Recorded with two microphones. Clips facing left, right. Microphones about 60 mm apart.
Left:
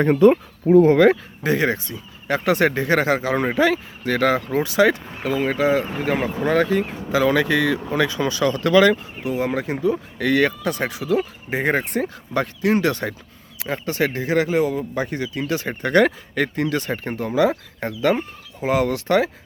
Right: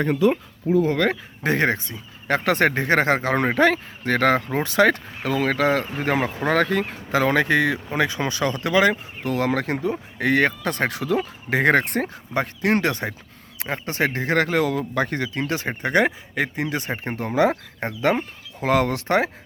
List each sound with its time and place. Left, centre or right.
0.0 s speech: left
0.7 s speech: left
1.5 s speech: right
5.2 s speech: right
9.2 s speech: right
9.9 s speech: right
11.4 s speech: right
12.8 s speech: right
14.6 s a man's voice: right
14.9 s speech: right
17.2 s speech: right
18.6 s speech: right
18.9 s speech: right